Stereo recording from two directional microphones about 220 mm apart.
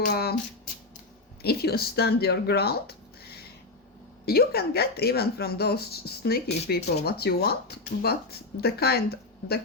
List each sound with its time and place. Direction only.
0.0 s speech: 45° left (ahead or behind)
1.4 s speech: 45° left (ahead or behind)